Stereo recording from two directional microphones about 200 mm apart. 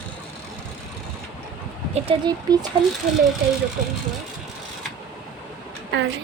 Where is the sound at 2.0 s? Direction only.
25° right (ahead or behind).